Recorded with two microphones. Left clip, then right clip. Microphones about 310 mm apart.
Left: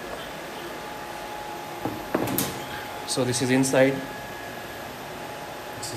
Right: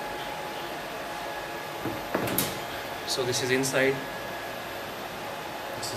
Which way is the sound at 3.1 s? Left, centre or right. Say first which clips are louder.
Left 2 dB; centre.